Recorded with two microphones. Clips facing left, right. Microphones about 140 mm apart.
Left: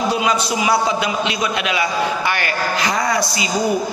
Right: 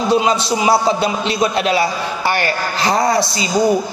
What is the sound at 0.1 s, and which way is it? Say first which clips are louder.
A man's voice: right 4 dB; 30° right (ahead or behind).